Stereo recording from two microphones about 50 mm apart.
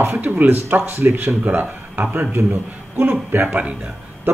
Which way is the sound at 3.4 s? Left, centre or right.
Right.